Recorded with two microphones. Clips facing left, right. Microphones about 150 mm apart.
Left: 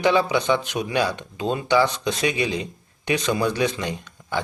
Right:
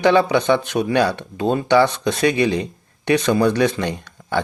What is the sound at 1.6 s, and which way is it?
Speech, 60° right (ahead or behind).